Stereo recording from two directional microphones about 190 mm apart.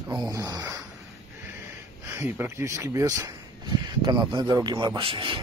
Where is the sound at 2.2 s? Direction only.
10° right (ahead or behind); by 5.4 s 25° right (ahead or behind).